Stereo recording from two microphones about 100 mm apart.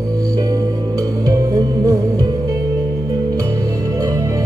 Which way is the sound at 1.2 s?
35° right (ahead or behind).